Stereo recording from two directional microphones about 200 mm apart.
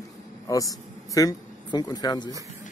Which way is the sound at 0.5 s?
15° left (ahead or behind).